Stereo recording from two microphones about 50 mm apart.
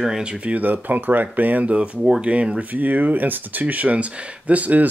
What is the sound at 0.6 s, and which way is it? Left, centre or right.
Speech, right.